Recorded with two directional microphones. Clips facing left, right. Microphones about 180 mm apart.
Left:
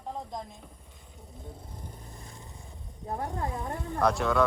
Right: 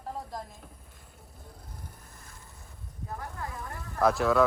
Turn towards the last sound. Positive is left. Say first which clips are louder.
# right 1 dB
turn(degrees=0)  # may be behind; listen again after turning